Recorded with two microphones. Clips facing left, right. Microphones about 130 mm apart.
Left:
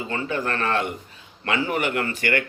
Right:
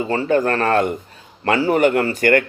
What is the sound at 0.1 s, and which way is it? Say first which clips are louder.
A man's voice: right 9 dB; 40° right (ahead or behind).